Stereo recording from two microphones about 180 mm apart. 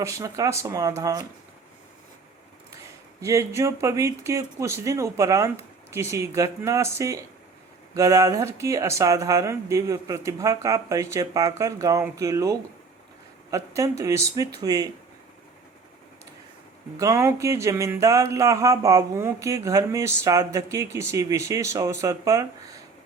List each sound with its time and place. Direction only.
0.0 s music: 15° right (ahead or behind)
3.2 s music: 15° right (ahead or behind)
13.5 s speech: 15° right (ahead or behind)
17.0 s music: 15° right (ahead or behind)